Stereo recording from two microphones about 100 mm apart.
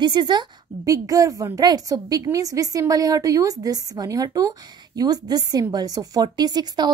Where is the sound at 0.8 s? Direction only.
35° right (ahead or behind).